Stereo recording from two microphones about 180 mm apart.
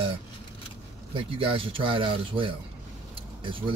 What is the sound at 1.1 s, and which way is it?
Speech, 30° right (ahead or behind).